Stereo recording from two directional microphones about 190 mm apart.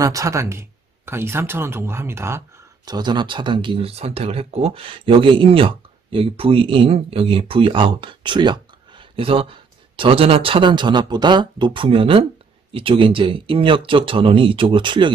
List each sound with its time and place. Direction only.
0.0 s speech: 15° right (ahead or behind)